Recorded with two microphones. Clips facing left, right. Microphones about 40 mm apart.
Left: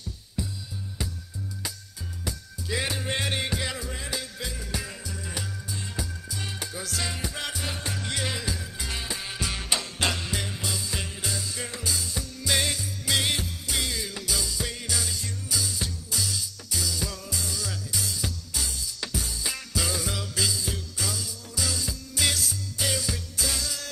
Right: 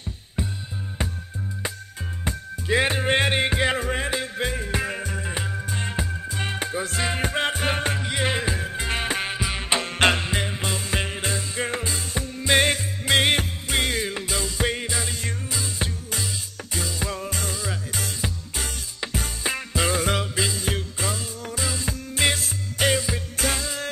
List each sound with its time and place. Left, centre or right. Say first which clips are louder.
2.2 s music: right 8 dB; right
7.2 s music: right 9 dB; right
8.0 s music: right 5 dB; right
8.3 s music: right 7 dB; right
9.4 s music: right 5 dB; right